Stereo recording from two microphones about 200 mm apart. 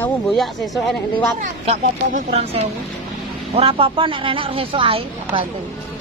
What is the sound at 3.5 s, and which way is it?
A woman's voice, 30° right (ahead or behind).